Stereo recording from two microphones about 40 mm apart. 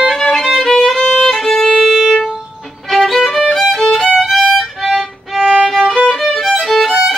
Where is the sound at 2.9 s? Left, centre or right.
Centre.